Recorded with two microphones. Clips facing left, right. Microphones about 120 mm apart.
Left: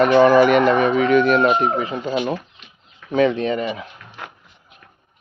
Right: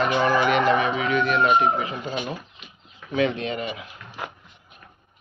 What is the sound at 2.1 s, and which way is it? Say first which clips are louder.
Speech: left 10 dB; 65° left (ahead or behind).